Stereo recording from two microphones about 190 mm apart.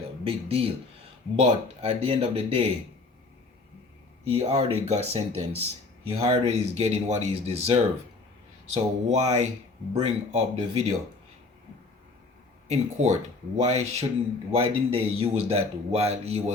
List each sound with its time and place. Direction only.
0.3 s speech: 30° right (ahead or behind)
4.3 s speech: 35° right (ahead or behind)
12.6 s speech: 35° right (ahead or behind)